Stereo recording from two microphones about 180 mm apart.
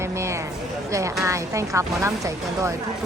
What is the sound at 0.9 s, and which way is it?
A woman's voice, 15° right (ahead or behind).